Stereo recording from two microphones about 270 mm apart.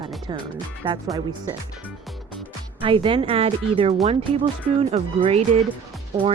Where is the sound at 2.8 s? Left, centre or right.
Centre.